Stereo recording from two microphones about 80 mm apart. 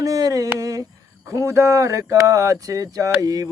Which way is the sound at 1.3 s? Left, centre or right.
Right.